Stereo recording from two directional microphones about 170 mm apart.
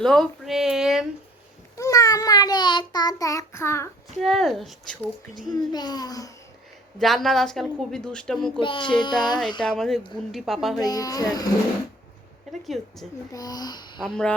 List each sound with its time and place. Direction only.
0.0 s speech: centre (ahead or behind)
1.7 s a child's voice: 20° left (ahead or behind)
4.2 s a woman's voice: centre (ahead or behind)
5.5 s a child's voice: 25° left (ahead or behind)
7.0 s a woman's voice: centre (ahead or behind)
8.6 s child singing: 30° left (ahead or behind)
9.0 s a child's voice: 25° left (ahead or behind)
9.6 s a woman's voice: 5° left (ahead or behind)
10.8 s a child's voice: 20° left (ahead or behind)
12.6 s a woman's voice: centre (ahead or behind)
13.3 s a child's voice: 20° left (ahead or behind)
14.0 s a woman's voice: 5° left (ahead or behind)